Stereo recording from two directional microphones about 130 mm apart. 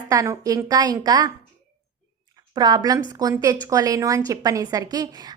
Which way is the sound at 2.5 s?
30° right (ahead or behind).